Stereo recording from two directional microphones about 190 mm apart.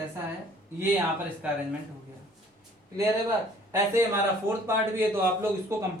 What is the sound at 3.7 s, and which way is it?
A man's voice, 15° right (ahead or behind).